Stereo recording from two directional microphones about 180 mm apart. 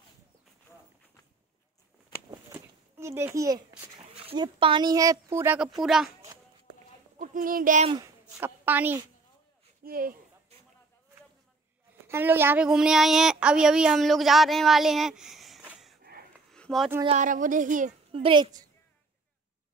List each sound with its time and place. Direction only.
3.0 s a child's voice: 15° right (ahead or behind)
4.1 s speech: 30° right (ahead or behind); by 6.0 s centre (ahead or behind)
7.2 s speech: 50° right (ahead or behind)
8.0 s a woman's voice: 15° right (ahead or behind)
9.8 s speech: 55° right (ahead or behind)
12.1 s speech: 10° right (ahead or behind)
16.0 s wheeze: 55° right (ahead or behind)
16.5 s a sound: 5° left (ahead or behind)
17.0 s speech: 40° right (ahead or behind)
18.1 s a woman's voice: 30° right (ahead or behind)